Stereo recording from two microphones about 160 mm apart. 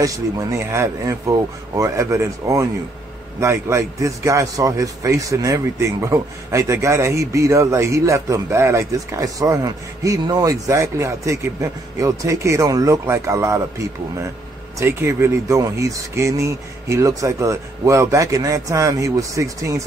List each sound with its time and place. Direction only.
0.0 s a man's voice: 20° right (ahead or behind)
14.8 s a man's voice: 15° right (ahead or behind)